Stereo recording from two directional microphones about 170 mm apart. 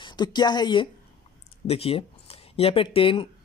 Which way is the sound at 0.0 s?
25° left (ahead or behind).